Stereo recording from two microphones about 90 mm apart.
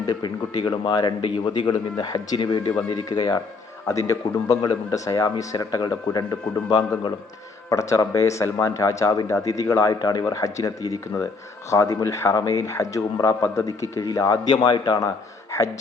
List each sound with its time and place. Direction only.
0.0 s speech: 50° left (ahead or behind)
7.7 s speech: 35° left (ahead or behind)
15.5 s speech: 35° left (ahead or behind)